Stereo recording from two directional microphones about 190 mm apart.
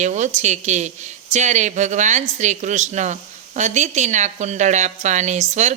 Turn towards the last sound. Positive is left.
turn(degrees=-35)  # may be behind; listen again after turning